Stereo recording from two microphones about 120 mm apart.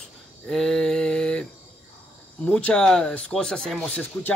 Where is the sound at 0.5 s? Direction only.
5° left (ahead or behind).